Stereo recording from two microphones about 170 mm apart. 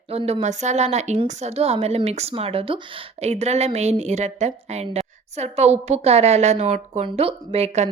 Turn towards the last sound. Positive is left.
turn(degrees=-40)  # may be behind; listen again after turning